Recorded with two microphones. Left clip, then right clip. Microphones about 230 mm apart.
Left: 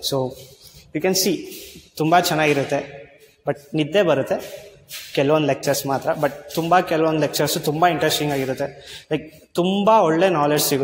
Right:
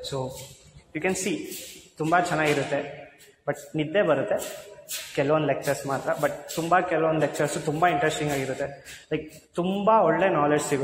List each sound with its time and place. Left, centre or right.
0.9 s a man's voice: left